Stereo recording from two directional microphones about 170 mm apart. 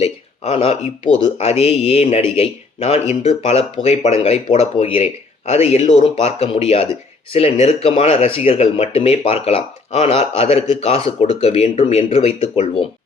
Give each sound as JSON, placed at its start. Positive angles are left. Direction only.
{"t": 0.0, "sound": "speech", "side_deg": 35}